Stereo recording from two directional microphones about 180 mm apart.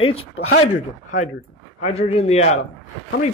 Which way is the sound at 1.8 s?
35° left (ahead or behind).